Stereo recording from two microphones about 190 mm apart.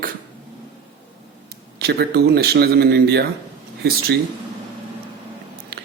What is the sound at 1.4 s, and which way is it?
Speech, 55° right (ahead or behind).